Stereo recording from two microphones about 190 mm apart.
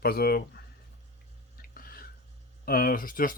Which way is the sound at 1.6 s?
50° left (ahead or behind).